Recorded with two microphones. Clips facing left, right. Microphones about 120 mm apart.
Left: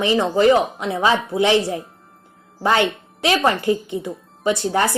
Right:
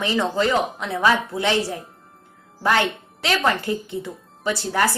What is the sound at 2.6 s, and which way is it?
A woman's voice, 20° left (ahead or behind).